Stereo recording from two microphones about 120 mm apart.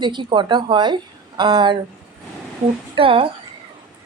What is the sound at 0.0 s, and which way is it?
A woman's voice, 40° right (ahead or behind).